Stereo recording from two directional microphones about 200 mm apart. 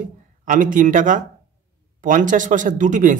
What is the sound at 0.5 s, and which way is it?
A man's voice, 40° right (ahead or behind).